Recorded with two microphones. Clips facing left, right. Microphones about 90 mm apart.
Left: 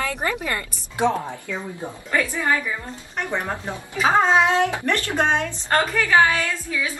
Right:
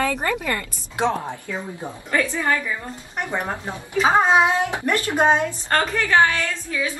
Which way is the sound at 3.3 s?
15° right (ahead or behind).